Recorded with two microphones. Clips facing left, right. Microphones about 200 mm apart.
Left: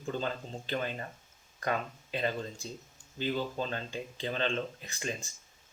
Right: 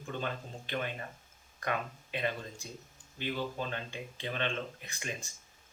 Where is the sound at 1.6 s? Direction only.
35° left (ahead or behind).